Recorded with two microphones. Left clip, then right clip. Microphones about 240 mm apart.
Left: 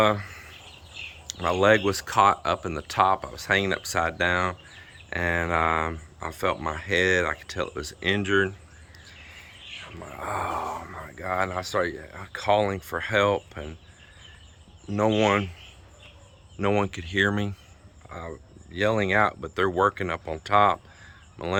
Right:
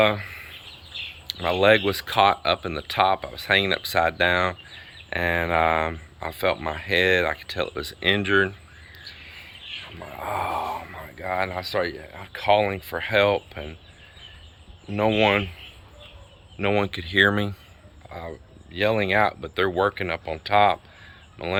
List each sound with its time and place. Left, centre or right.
0.0 s a sound: left
1.4 s speech: centre
10.0 s speech: centre
14.9 s speech: centre
16.6 s speech: centre